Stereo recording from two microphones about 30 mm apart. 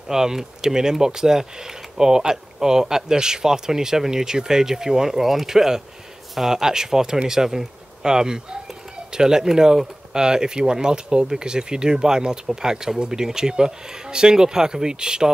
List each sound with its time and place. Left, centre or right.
0.1 s speech: centre